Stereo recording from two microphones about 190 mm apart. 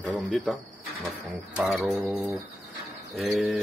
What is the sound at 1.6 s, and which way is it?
Mantra, centre (ahead or behind).